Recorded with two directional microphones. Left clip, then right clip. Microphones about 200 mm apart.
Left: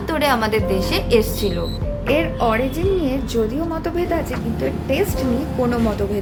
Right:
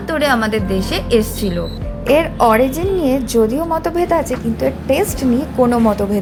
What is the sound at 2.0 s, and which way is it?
A woman's voice, 20° right (ahead or behind).